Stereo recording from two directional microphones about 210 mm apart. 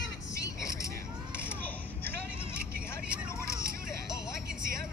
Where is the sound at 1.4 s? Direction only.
10° left (ahead or behind).